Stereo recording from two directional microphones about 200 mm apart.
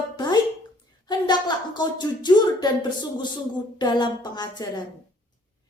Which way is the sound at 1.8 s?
20° left (ahead or behind).